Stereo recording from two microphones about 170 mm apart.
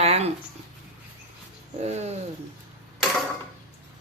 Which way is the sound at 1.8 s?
40° right (ahead or behind).